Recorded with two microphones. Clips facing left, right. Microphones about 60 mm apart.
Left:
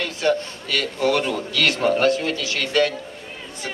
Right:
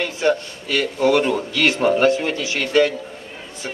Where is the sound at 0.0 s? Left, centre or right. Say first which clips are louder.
Right 2 dB; centre.